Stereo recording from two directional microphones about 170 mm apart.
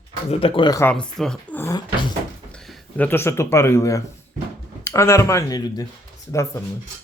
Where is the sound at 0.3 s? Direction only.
35° left (ahead or behind).